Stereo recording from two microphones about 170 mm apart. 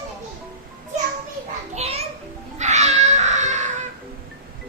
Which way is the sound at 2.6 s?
45° right (ahead or behind).